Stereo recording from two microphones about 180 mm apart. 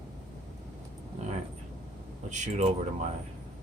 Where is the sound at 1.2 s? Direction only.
35° right (ahead or behind).